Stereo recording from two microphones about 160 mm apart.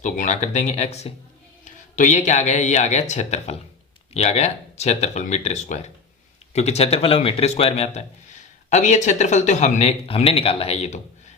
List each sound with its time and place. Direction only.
0.0 s speech: 50° left (ahead or behind)